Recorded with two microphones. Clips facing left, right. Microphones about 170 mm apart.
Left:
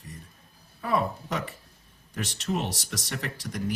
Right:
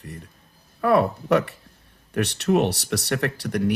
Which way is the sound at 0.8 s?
65° right (ahead or behind).